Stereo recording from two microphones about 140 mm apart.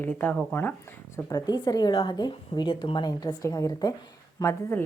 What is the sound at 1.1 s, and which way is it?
Speech, 25° left (ahead or behind).